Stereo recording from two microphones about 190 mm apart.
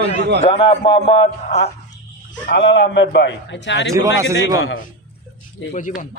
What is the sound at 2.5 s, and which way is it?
A man's voice, 70° left (ahead or behind).